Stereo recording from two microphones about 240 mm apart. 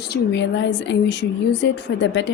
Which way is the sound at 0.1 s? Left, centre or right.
Left.